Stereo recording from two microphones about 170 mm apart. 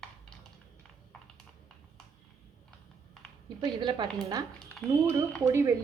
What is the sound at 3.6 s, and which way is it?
A woman's voice, 25° right (ahead or behind).